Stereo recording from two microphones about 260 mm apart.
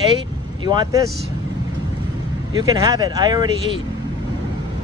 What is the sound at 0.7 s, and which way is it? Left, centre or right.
Speech, centre.